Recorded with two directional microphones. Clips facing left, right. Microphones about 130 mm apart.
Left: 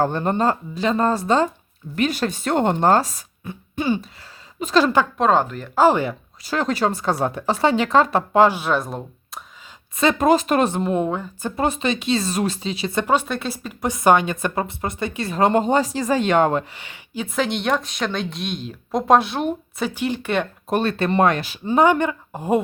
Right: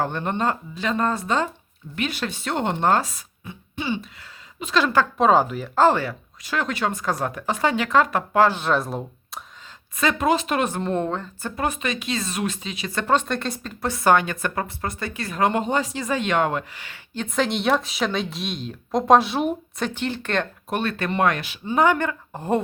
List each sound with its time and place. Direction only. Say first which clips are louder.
0.0 s speech: left 4 dB; 35° left (ahead or behind)
5.1 s speech: even; 5° right (ahead or behind)
5.7 s a woman's voice: left 2 dB; 10° left (ahead or behind)
6.4 s speech: left 4 dB; 35° left (ahead or behind)
8.4 s speech: left 1 dB; 5° left (ahead or behind)
10.2 s speech: left 5 dB; 45° left (ahead or behind)
10.7 s a woman's voice: left 3 dB; 15° left (ahead or behind)
11.5 s a woman's voice: left 4 dB; 30° left (ahead or behind)
13.0 s a woman's voice: left 1 dB; 10° left (ahead or behind); by 16.6 s 35° left (ahead or behind)
16.7 s a woman's voice: left 1 dB; 20° left (ahead or behind)
17.2 s speech: even; centre (ahead or behind)
19.9 s a woman's voice: left 4 dB; 10° left (ahead or behind)
20.7 s speech: left 5 dB; 35° left (ahead or behind)
21.8 s a woman's voice: left 3 dB; 20° left (ahead or behind)